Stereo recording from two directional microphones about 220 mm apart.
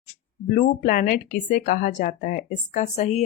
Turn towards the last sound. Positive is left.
turn(degrees=30)  # may be behind; listen again after turning